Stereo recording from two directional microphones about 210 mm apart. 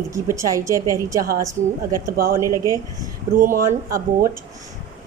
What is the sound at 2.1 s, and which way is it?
Speech, 45° right (ahead or behind).